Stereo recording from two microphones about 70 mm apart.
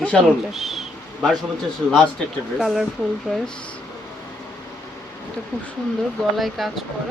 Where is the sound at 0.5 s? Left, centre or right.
Centre.